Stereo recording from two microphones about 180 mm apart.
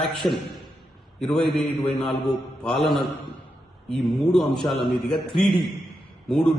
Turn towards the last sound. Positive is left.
turn(degrees=5)  # may be behind; listen again after turning